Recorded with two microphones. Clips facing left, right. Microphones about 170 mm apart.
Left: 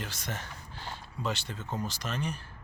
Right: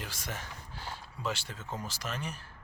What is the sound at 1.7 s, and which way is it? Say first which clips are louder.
Speech: left 4 dB; 5° right (ahead or behind).